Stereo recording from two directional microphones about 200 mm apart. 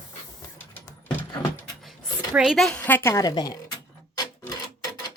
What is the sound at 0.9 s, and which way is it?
Keys jangling, 20° left (ahead or behind).